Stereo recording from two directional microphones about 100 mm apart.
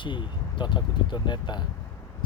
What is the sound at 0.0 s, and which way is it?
Speech, 55° left (ahead or behind).